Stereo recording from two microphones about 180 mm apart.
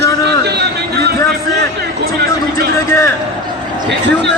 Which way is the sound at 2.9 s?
15° left (ahead or behind).